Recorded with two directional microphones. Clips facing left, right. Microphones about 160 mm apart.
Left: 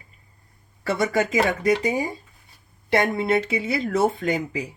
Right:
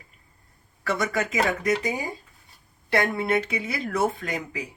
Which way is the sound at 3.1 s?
25° left (ahead or behind).